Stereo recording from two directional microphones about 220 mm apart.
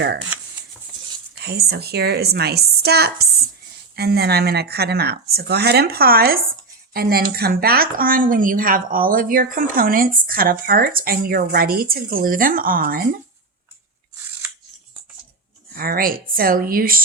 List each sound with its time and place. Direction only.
1.4 s a woman's voice: 45° right (ahead or behind)
15.7 s speech: 45° right (ahead or behind)